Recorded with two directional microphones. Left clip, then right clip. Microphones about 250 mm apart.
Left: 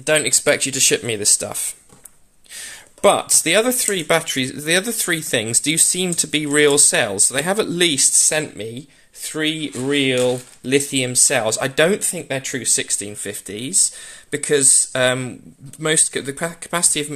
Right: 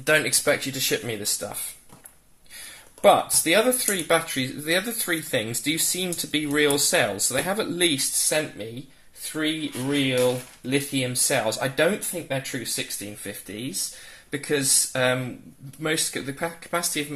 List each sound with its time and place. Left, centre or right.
0.0 s speech: left
3.0 s speech: left